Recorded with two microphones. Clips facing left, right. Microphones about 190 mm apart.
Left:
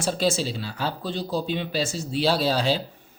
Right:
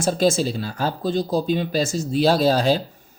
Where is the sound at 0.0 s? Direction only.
45° right (ahead or behind).